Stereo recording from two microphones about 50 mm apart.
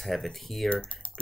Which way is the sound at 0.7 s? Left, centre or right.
Left.